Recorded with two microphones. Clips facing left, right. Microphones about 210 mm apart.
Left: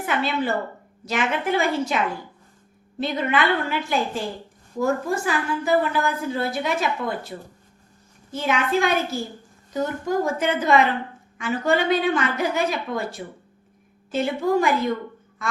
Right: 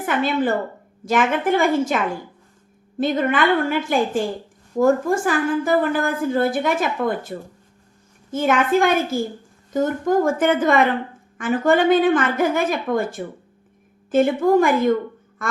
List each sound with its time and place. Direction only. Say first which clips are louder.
0.0 s a woman's voice: right 4 dB; 50° right (ahead or behind)